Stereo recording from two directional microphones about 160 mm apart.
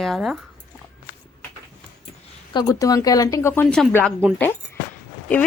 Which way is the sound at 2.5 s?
25° left (ahead or behind).